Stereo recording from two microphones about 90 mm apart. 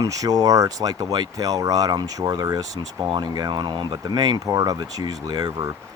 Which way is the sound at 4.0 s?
45° right (ahead or behind).